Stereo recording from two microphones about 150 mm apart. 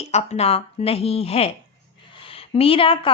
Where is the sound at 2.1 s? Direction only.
35° left (ahead or behind).